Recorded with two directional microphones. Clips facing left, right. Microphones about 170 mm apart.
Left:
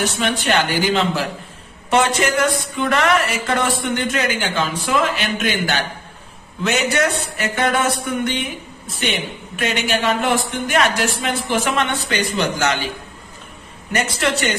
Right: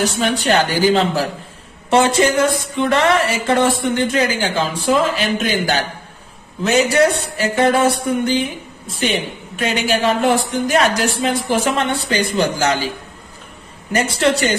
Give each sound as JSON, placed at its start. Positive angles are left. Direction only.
{"t": 0.0, "sound": "a woman's voice", "side_deg": -35}
{"t": 1.9, "sound": "a sound", "side_deg": -30}
{"t": 6.6, "sound": "a woman's voice", "side_deg": -35}
{"t": 14.1, "sound": "a woman's voice", "side_deg": -30}